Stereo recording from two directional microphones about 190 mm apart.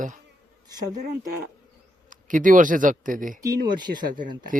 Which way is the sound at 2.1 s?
45° right (ahead or behind).